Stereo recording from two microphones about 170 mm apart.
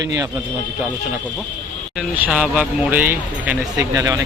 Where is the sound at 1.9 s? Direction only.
5° right (ahead or behind).